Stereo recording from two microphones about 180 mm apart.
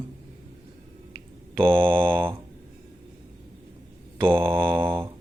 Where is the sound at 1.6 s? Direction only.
30° right (ahead or behind).